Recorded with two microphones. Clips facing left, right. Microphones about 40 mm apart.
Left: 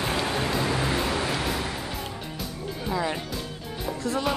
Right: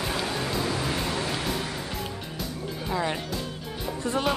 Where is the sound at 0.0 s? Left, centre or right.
Left.